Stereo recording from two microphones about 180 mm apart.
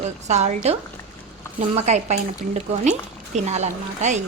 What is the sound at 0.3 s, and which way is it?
Speech, 40° right (ahead or behind).